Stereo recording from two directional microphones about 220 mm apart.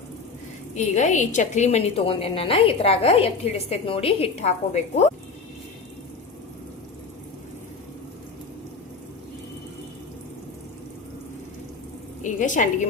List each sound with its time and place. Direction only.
0.8 s a woman's voice: 35° left (ahead or behind)
12.2 s a woman's voice: 35° left (ahead or behind)